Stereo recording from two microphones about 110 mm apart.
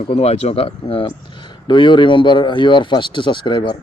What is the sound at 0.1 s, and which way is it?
Speech, 70° left (ahead or behind).